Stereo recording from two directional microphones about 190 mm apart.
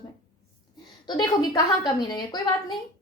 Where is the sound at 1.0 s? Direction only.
20° left (ahead or behind).